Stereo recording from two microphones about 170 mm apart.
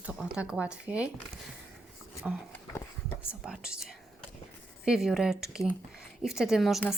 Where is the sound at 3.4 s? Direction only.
5° right (ahead or behind).